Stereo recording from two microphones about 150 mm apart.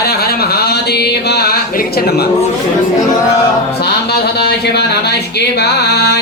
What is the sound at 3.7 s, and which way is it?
Speech, 90° left.